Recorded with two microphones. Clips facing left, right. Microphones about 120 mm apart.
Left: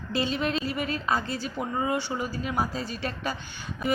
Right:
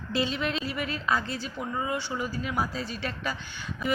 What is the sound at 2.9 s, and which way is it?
Speech, 40° left (ahead or behind).